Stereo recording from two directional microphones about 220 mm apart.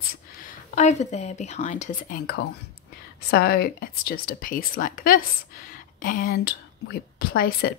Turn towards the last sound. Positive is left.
turn(degrees=45)  # may be behind; listen again after turning